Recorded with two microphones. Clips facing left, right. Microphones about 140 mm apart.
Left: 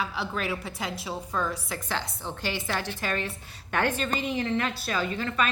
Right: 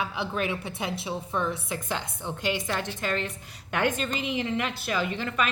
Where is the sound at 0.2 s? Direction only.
25° right (ahead or behind).